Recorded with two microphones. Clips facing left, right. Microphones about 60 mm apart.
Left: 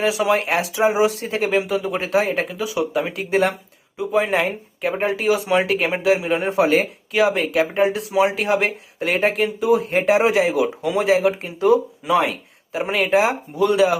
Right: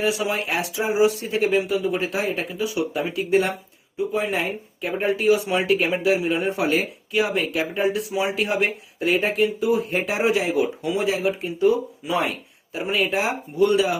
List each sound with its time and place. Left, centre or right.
0.0 s speech: left
12.7 s speech: left